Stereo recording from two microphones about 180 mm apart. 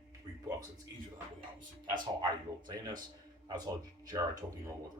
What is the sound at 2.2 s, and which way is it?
Speech, 25° right (ahead or behind).